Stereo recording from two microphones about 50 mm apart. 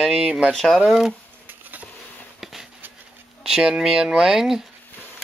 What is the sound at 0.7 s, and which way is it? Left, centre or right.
Speech, centre.